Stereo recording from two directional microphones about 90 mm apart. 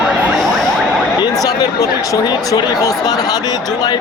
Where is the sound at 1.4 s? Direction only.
40° left (ahead or behind).